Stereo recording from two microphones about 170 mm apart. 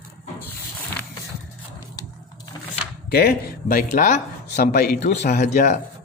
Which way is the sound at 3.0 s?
65° left (ahead or behind).